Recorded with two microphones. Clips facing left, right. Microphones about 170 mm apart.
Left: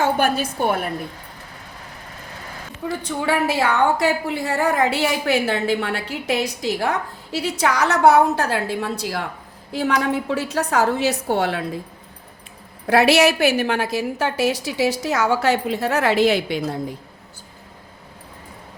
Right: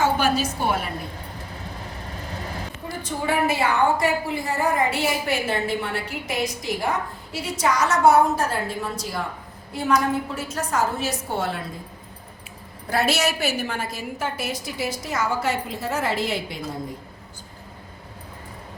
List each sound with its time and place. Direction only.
0.0 s a woman's voice: 55° left (ahead or behind)
3.0 s a woman's voice: 70° left (ahead or behind)
12.9 s a woman's voice: 65° left (ahead or behind)